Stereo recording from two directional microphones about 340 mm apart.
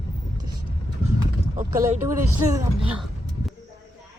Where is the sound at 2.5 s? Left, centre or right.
Centre.